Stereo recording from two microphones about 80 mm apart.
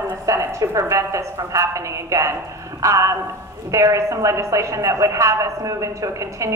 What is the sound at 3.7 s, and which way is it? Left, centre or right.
Speech, right.